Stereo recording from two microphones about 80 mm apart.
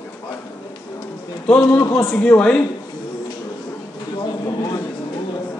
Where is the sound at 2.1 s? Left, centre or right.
Left.